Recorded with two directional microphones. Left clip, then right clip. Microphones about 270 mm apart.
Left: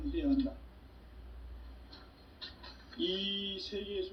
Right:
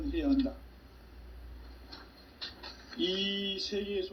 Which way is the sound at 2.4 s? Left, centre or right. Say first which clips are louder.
Right 5 dB; right.